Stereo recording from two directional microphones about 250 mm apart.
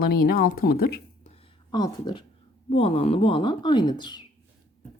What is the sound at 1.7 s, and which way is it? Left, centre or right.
Speech, centre.